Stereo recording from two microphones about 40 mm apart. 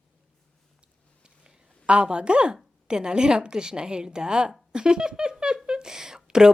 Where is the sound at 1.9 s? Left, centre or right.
Right.